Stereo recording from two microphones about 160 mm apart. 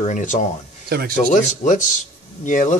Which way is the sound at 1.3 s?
50° left (ahead or behind).